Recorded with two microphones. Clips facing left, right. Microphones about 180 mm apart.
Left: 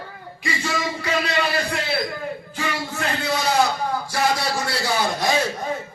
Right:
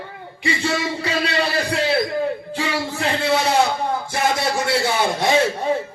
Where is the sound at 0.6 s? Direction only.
30° right (ahead or behind).